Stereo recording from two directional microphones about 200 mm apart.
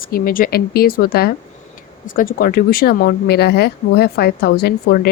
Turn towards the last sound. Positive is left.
turn(degrees=50)  # may be behind; listen again after turning